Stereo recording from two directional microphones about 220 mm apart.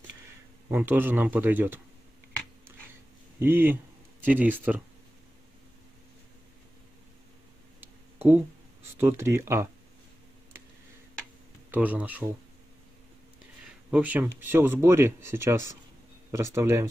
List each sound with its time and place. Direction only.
0.7 s speech: 10° right (ahead or behind)
3.3 s speech: 10° right (ahead or behind)
7.8 s a sound: 10° right (ahead or behind)
8.9 s speech: 10° right (ahead or behind)
11.7 s speech: 5° right (ahead or behind)
13.8 s speech: 5° right (ahead or behind)